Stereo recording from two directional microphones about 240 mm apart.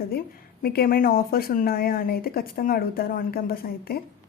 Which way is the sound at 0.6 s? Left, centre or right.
Left.